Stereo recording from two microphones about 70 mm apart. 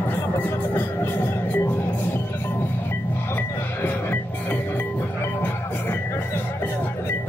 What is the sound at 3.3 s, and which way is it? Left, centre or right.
Music, left.